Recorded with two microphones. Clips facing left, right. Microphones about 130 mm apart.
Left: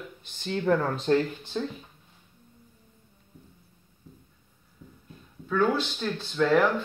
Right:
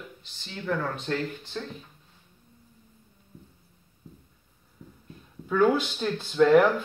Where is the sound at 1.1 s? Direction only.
30° left (ahead or behind).